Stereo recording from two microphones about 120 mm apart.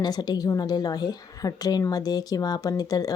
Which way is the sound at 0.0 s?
35° left (ahead or behind).